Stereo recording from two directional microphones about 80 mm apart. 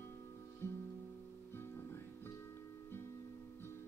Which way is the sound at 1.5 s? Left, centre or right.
Left.